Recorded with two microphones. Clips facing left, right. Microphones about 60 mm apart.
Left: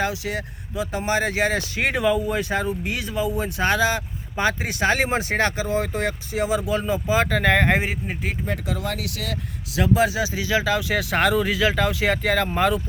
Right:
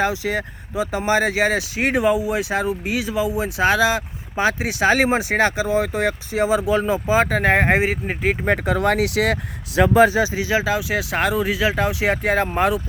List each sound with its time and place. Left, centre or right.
0.0 s speech: right
1.5 s speech: centre; by 7.9 s right
8.0 s speech: right
10.3 s speech: right
12.1 s speech: right